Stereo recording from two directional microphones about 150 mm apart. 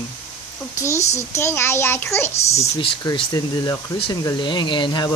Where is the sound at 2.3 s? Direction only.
45° left (ahead or behind).